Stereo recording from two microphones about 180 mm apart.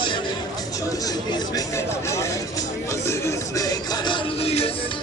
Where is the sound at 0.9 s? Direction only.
20° left (ahead or behind).